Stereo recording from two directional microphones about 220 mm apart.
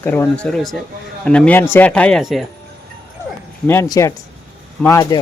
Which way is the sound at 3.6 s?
10° left (ahead or behind).